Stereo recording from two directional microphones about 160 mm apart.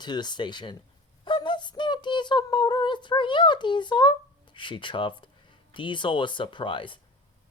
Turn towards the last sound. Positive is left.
turn(degrees=30)  # may be behind; listen again after turning